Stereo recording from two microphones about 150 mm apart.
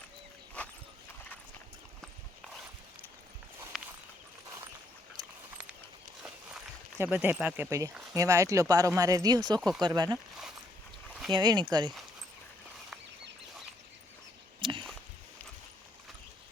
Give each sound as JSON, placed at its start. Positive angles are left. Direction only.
{"t": 3.7, "sound": "walk", "side_deg": -5}
{"t": 7.0, "sound": "speech", "side_deg": -10}
{"t": 9.6, "sound": "speech", "side_deg": 0}
{"t": 9.8, "sound": "speech", "side_deg": -25}
{"t": 11.3, "sound": "speech", "side_deg": -30}
{"t": 14.6, "sound": "a sound", "side_deg": -35}